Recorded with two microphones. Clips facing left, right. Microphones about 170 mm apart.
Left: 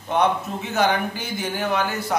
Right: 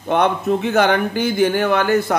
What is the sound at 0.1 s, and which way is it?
Speech, 65° right (ahead or behind).